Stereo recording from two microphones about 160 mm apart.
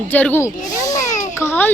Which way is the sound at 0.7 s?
20° left (ahead or behind).